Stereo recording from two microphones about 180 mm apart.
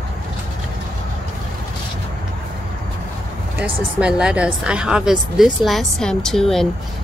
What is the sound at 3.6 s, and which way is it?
Speech, 5° right (ahead or behind).